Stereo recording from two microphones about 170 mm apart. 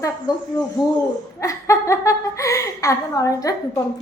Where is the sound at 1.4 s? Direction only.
20° left (ahead or behind).